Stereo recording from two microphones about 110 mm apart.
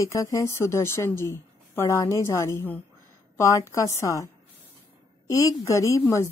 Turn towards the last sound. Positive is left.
turn(degrees=25)  # may be behind; listen again after turning